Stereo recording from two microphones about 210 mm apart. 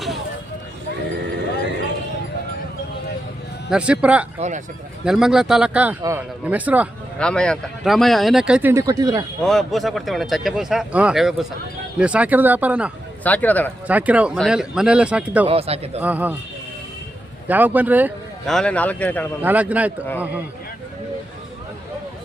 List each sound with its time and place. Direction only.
3.7 s speech: 5° right (ahead or behind)
4.4 s speech: 35° right (ahead or behind)
5.0 s speech: centre (ahead or behind)
7.2 s speech: 5° left (ahead or behind); by 9.2 s 20° right (ahead or behind)
9.4 s speech: centre (ahead or behind)
13.2 s speech: 5° left (ahead or behind)
13.8 s speech: 5° right (ahead or behind)
15.4 s speech: 30° right (ahead or behind)
16.0 s speech: 5° right (ahead or behind)
17.5 s speech: 10° right (ahead or behind); by 19.3 s 5° left (ahead or behind)
19.4 s speech: 10° right (ahead or behind)